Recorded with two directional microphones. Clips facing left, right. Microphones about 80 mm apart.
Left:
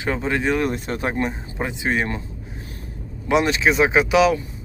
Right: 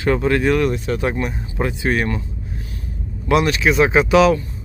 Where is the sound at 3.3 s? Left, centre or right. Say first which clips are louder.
Right 2 dB; left.